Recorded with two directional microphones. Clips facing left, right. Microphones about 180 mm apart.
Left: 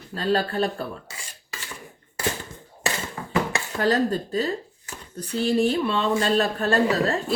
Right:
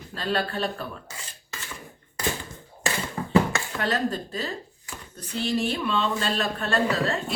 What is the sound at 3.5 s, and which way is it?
Speech, 35° left (ahead or behind).